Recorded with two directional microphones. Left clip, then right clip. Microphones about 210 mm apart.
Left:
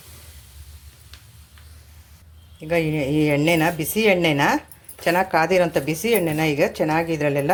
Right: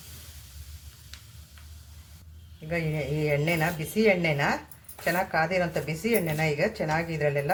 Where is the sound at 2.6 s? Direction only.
40° left (ahead or behind).